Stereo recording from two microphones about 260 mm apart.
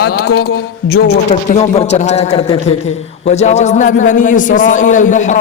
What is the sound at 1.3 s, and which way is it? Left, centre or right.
A man's voice, left.